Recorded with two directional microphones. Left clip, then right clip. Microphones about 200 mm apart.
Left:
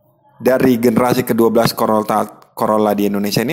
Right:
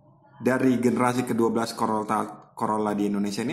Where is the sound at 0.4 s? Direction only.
40° left (ahead or behind).